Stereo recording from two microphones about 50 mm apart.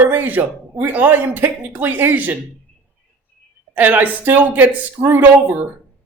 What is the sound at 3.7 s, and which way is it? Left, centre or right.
Speech, right.